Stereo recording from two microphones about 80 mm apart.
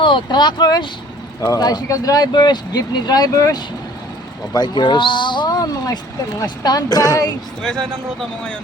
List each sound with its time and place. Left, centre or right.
0.0 s speech: left
1.4 s speech: left
4.5 s speech: left
5.5 s a sound: left
6.4 s speech: left
7.6 s speech: centre